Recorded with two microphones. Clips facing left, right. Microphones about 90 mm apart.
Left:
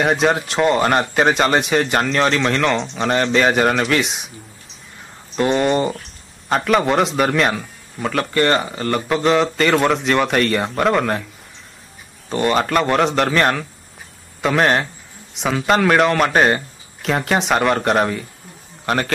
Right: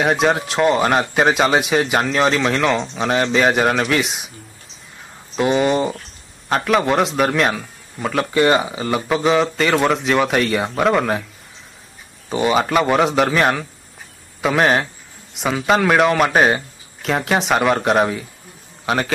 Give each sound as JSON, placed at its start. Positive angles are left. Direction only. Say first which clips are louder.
{"t": 0.0, "sound": "speech", "louder": "even", "side_deg": 0}
{"t": 5.3, "sound": "speech", "louder": "even", "side_deg": 0}
{"t": 12.3, "sound": "speech", "louder": "even", "side_deg": -5}